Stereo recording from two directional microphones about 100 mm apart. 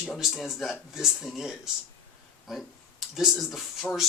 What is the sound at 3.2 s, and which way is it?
Speech, centre (ahead or behind).